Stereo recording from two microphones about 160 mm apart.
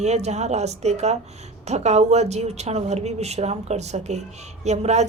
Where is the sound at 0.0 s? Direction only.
45° right (ahead or behind).